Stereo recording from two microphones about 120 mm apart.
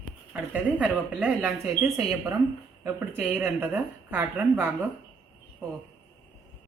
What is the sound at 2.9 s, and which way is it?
A woman's voice, 15° right (ahead or behind).